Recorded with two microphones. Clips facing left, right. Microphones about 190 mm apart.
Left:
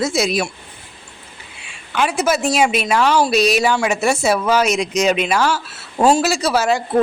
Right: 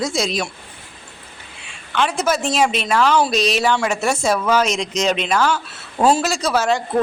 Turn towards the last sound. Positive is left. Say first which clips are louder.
# left 2 dB
turn(degrees=10)  # may be behind; listen again after turning